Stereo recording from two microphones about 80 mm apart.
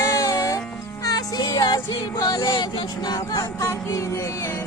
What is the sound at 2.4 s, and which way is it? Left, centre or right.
Speech, left.